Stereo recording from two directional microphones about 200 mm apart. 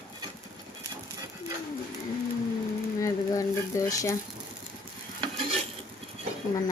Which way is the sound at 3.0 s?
15° left (ahead or behind).